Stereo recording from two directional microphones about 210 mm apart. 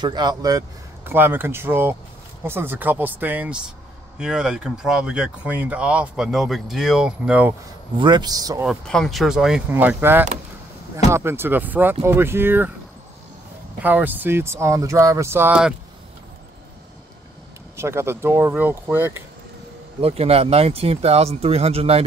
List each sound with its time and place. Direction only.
0.0 s speech: 20° right (ahead or behind)
8.0 s speech: 20° right (ahead or behind)
8.6 s speech: centre (ahead or behind)
13.8 s speech: 10° right (ahead or behind)
17.7 s speech: 10° right (ahead or behind)
20.0 s speech: 30° right (ahead or behind)